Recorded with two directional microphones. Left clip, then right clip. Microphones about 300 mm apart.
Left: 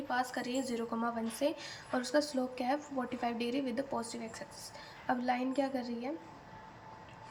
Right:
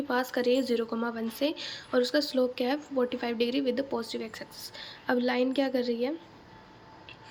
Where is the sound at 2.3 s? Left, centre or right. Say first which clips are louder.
Right 7 dB; centre.